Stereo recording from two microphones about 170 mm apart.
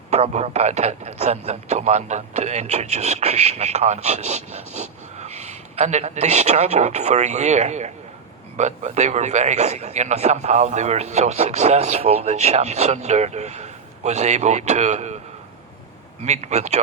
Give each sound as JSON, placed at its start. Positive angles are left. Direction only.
{"t": 0.1, "sound": "a man's voice", "side_deg": -40}
{"t": 16.2, "sound": "a man's voice", "side_deg": -40}